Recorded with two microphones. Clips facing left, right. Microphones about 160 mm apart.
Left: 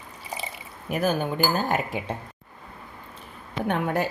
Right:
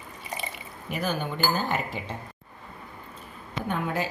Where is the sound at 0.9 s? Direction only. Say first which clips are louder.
Left 5 dB; 50° left (ahead or behind).